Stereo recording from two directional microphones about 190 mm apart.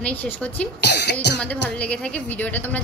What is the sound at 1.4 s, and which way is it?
A woman's voice, 5° left (ahead or behind).